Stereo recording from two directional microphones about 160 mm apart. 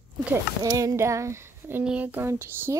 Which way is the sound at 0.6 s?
20° right (ahead or behind).